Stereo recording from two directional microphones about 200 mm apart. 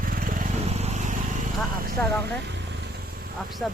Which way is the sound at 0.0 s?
45° right (ahead or behind).